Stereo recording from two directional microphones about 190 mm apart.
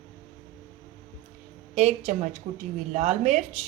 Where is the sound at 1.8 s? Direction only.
35° right (ahead or behind).